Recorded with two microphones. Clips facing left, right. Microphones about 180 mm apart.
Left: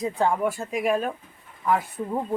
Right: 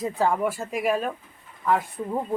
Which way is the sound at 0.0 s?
Centre (ahead or behind).